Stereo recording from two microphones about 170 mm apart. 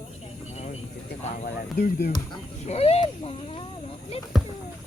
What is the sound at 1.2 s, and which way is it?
Speech, 50° left (ahead or behind).